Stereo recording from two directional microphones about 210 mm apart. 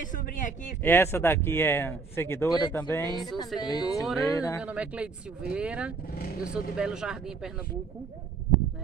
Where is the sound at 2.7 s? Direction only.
10° left (ahead or behind).